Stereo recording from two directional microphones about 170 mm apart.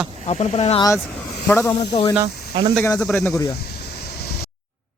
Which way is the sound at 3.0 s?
5° left (ahead or behind).